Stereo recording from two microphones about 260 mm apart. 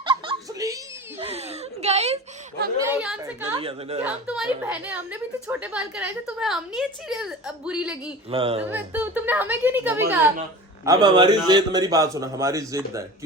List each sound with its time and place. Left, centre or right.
0.0 s giggle: centre
1.2 s a sound: right
2.8 s a man's voice: centre; by 4.0 s right
4.0 s a woman's voice: centre
8.3 s speech: right
8.7 s a man's voice: centre